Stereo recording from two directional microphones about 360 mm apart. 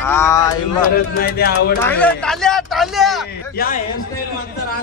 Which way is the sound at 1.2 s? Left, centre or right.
Left.